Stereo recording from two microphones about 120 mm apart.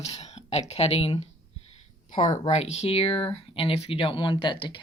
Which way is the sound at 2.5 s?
60° left (ahead or behind).